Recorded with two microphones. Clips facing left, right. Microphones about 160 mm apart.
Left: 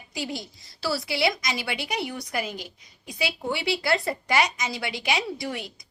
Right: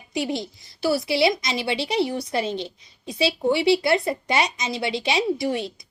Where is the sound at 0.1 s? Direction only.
25° right (ahead or behind).